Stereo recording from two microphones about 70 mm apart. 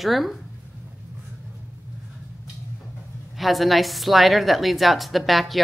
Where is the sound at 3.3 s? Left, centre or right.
Centre.